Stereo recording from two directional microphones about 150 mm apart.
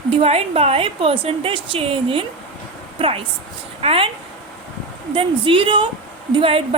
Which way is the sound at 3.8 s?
40° right (ahead or behind).